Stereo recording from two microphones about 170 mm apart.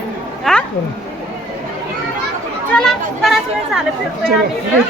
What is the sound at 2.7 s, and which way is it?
Speech, centre (ahead or behind).